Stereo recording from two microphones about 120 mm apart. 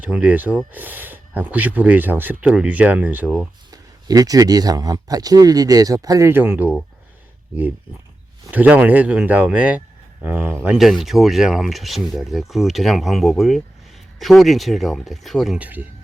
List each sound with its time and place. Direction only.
0.0 s speech: 10° right (ahead or behind)
3.7 s speech: 30° right (ahead or behind); by 6.7 s 15° right (ahead or behind)
8.4 s speech: 15° right (ahead or behind)
10.8 s speech: centre (ahead or behind)
15.5 s speech: 15° right (ahead or behind)